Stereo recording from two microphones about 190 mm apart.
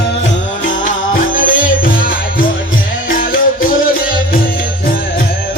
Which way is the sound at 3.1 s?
50° left (ahead or behind).